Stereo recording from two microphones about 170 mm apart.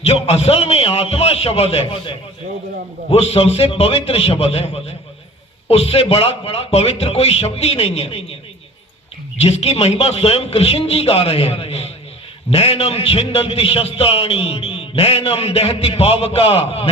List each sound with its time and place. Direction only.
0.0 s a man's voice: 35° left (ahead or behind)
9.4 s a man's voice: 35° left (ahead or behind)